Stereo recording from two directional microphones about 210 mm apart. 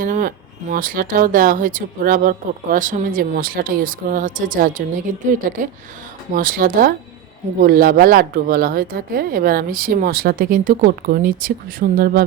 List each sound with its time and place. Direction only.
0.0 s speech: 40° right (ahead or behind)